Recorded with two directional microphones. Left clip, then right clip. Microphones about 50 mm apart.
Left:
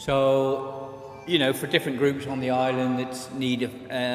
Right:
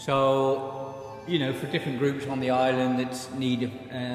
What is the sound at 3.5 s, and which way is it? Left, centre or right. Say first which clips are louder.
Speech: left 3 dB; left.